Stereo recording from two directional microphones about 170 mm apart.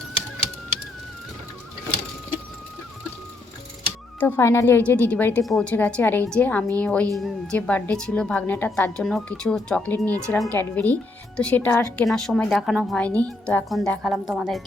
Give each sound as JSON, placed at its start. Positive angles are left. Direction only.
{"t": 4.2, "sound": "a woman's voice", "side_deg": 15}
{"t": 11.9, "sound": "a woman's voice", "side_deg": 5}